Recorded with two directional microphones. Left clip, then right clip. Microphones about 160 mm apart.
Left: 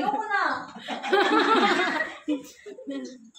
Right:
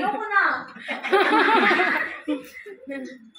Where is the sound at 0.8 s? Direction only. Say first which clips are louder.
Right 3 dB; 35° left (ahead or behind).